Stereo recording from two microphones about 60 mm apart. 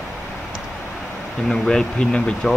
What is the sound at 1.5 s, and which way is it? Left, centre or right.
Speech, centre.